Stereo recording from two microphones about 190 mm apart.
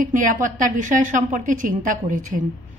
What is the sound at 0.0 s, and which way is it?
A woman's voice, 45° right (ahead or behind).